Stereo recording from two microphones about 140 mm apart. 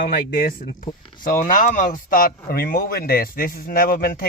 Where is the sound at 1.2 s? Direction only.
75° left (ahead or behind).